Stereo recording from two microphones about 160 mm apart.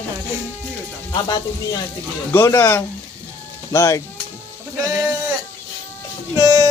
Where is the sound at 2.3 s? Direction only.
15° left (ahead or behind).